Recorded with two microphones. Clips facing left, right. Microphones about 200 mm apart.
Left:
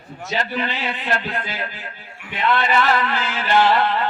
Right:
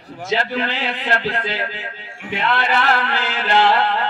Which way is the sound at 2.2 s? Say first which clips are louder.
Even; 85° right.